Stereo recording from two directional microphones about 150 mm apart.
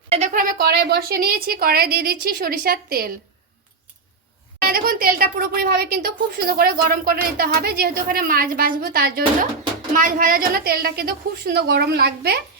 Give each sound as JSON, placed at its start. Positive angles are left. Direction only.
{"t": 0.1, "sound": "speech", "side_deg": -55}
{"t": 4.6, "sound": "speech", "side_deg": -80}
{"t": 9.9, "sound": "a woman's voice", "side_deg": -65}